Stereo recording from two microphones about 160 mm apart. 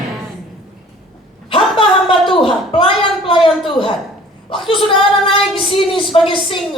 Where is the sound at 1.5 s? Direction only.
30° left (ahead or behind).